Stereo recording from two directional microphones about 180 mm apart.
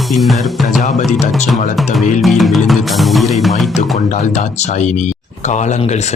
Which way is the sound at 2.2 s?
Centre (ahead or behind).